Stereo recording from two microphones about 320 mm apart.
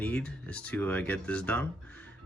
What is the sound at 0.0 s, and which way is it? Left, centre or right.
Speech, centre.